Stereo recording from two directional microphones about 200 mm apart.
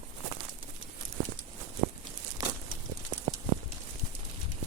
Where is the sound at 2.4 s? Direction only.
20° right (ahead or behind).